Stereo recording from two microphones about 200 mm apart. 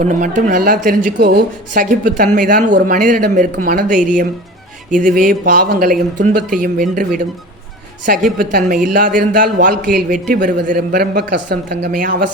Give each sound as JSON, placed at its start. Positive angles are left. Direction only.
{"t": 0.0, "sound": "a woman's voice", "side_deg": -40}